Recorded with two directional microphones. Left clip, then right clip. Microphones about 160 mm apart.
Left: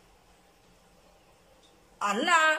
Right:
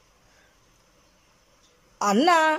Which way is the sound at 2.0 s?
35° right (ahead or behind).